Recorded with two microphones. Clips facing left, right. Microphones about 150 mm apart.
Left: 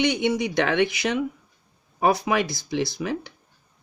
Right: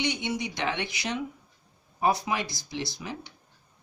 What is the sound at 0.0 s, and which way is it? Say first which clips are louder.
Speech: left 8 dB; 60° left (ahead or behind).